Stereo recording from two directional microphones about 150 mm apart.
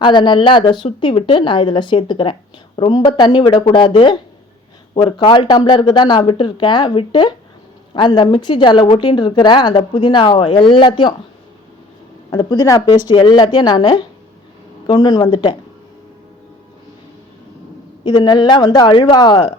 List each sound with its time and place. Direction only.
0.0 s speech: 30° left (ahead or behind)
12.3 s a woman's voice: 30° left (ahead or behind)
18.0 s a woman's voice: 30° left (ahead or behind)